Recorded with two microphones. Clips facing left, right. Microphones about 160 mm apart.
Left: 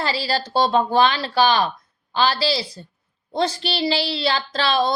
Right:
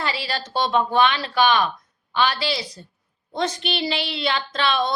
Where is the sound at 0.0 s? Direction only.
35° left (ahead or behind).